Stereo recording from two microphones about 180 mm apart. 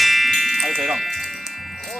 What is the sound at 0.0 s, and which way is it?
Music, centre (ahead or behind).